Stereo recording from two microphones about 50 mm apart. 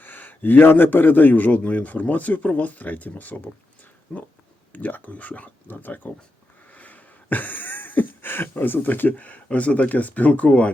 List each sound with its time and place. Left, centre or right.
0.0 s a man's voice: left
4.7 s a man's voice: left
6.7 s a sound: left